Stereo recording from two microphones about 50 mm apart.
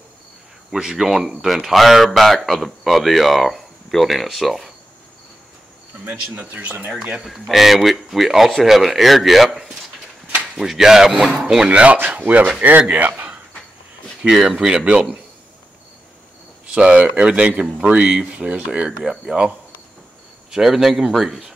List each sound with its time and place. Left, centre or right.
0.7 s speech: centre
6.4 s speech: right
7.2 s speech: centre
12.1 s speech: right
12.7 s speech: right
14.3 s speech: centre
14.7 s speech: centre
16.6 s speech: right
17.9 s speech: centre
20.5 s speech: centre